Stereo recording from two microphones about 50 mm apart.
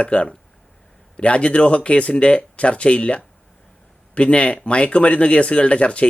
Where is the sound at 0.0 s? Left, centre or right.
Left.